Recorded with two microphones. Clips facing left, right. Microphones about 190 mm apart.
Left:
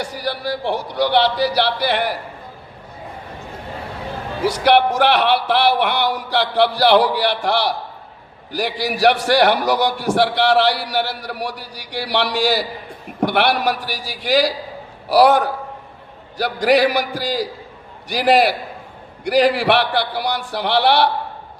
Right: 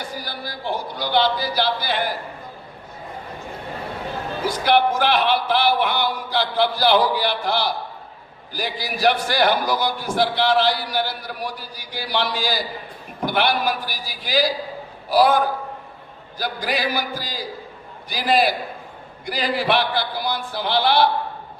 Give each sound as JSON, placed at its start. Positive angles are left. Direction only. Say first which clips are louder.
{"t": 0.0, "sound": "a man's voice", "louder": "left 7 dB", "side_deg": 75}
{"t": 4.4, "sound": "a man's voice", "louder": "left 4 dB", "side_deg": 75}